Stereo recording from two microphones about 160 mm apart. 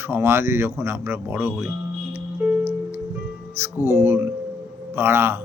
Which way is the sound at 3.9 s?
15° right (ahead or behind).